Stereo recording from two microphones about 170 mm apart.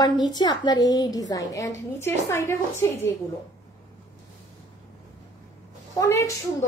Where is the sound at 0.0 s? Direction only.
25° left (ahead or behind).